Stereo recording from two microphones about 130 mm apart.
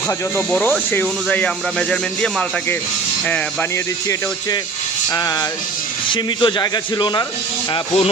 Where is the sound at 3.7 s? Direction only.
25° left (ahead or behind).